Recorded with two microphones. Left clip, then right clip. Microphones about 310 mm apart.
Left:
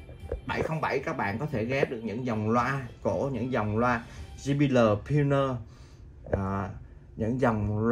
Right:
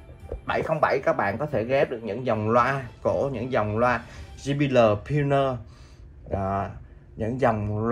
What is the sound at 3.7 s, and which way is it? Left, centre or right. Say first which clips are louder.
Speech: right 4 dB; right.